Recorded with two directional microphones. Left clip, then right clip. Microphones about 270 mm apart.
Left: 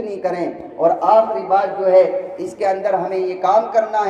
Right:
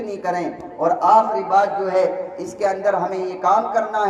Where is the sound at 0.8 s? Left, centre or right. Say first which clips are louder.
Left 1 dB; centre.